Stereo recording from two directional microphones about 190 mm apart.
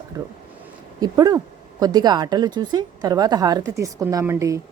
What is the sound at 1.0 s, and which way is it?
A woman's voice, 20° right (ahead or behind).